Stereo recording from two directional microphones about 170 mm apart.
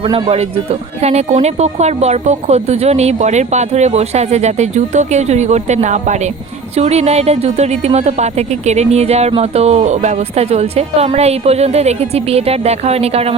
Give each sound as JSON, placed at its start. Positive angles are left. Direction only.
{"t": 0.0, "sound": "speech", "side_deg": -35}